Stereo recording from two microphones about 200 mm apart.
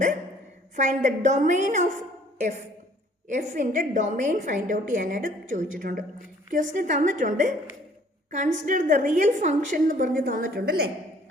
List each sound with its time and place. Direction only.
0.8 s a woman's voice: 35° right (ahead or behind)
3.2 s a woman's voice: 40° right (ahead or behind)